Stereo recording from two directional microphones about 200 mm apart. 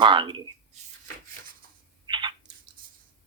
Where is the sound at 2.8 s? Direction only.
45° right (ahead or behind).